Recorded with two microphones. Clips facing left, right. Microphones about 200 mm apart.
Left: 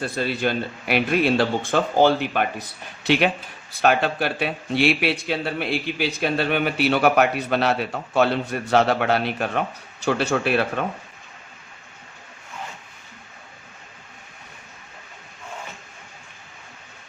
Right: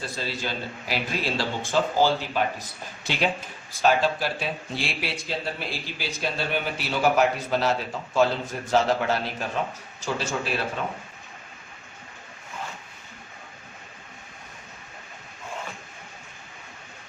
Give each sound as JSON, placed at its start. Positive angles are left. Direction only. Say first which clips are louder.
{"t": 0.0, "sound": "speech", "louder": "left 8 dB", "side_deg": 60}